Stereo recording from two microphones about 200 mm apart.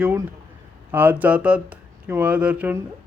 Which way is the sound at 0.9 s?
10° right (ahead or behind).